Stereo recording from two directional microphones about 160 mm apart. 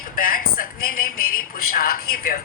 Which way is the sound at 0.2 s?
60° left (ahead or behind).